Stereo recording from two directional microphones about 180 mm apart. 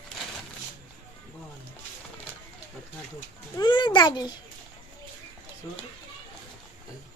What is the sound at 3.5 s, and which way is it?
Speech, 25° left (ahead or behind).